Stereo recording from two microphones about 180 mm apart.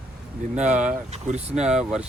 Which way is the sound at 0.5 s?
40° right (ahead or behind).